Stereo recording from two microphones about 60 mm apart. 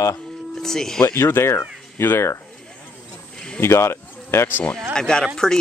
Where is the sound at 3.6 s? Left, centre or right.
Left.